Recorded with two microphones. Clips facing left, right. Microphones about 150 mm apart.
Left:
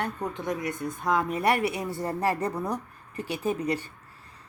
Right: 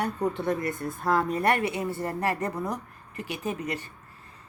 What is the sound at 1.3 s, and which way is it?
Speech, 10° left (ahead or behind).